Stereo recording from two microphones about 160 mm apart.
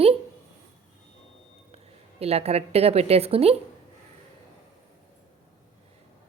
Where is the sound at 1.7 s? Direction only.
40° right (ahead or behind).